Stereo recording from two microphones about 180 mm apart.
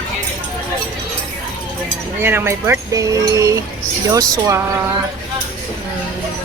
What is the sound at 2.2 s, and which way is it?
Speech, 15° right (ahead or behind).